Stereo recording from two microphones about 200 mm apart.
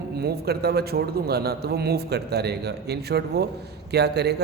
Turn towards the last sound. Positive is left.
turn(degrees=-55)  # may be behind; listen again after turning